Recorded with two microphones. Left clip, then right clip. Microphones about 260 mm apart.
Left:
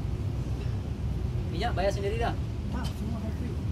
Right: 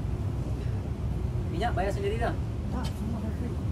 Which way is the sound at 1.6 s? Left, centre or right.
Centre.